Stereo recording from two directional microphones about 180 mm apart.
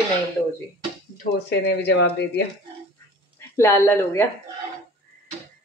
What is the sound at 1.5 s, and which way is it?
Speech, 70° left (ahead or behind).